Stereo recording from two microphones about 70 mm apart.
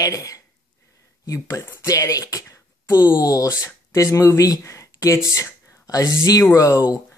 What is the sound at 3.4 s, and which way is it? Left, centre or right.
Speech, left.